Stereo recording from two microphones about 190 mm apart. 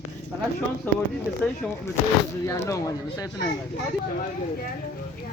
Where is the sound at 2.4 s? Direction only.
15° left (ahead or behind).